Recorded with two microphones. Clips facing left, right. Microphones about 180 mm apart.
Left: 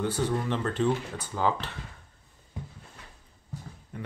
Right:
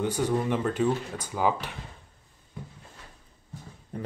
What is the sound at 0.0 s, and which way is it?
Speech, 15° right (ahead or behind).